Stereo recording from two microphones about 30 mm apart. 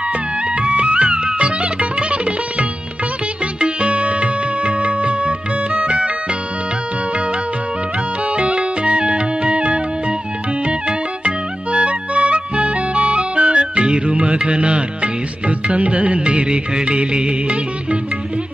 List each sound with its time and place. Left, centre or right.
0.6 s music: right
3.5 s music: right
8.4 s music: right